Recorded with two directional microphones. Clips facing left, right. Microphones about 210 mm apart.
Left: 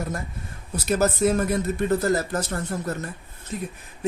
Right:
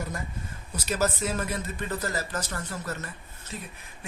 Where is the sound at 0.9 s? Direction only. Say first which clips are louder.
Left 7 dB; 55° left (ahead or behind).